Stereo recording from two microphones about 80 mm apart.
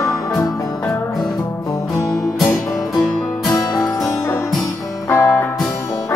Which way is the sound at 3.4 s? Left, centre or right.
Left.